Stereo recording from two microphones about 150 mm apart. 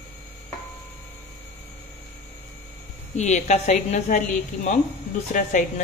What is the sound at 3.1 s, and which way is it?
A woman's voice, 50° left (ahead or behind).